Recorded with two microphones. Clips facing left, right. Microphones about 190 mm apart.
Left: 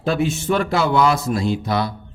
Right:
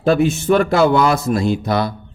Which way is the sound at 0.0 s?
50° right (ahead or behind).